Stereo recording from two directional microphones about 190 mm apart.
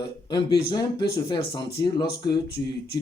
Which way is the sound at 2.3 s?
60° left (ahead or behind).